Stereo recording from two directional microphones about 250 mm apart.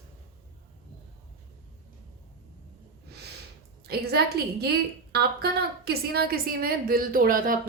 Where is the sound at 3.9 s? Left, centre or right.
Right.